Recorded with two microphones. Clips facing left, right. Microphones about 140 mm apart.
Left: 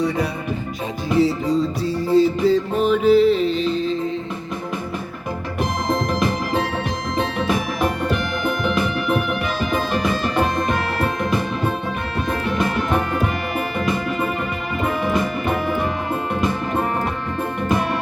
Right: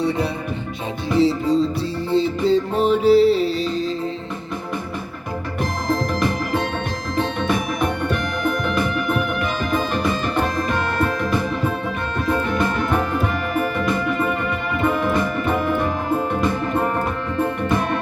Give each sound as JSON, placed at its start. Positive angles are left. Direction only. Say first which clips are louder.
{"t": 1.2, "sound": "music", "louder": "right 2 dB", "side_deg": -30}